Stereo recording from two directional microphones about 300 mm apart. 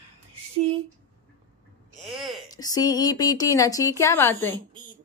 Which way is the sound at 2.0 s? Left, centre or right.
Centre.